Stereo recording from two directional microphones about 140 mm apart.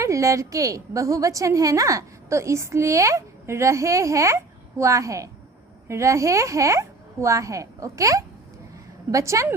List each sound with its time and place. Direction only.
0.0 s a woman's voice: 20° right (ahead or behind)